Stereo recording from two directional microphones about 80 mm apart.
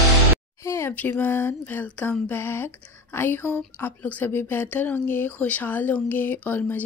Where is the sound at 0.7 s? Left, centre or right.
Left.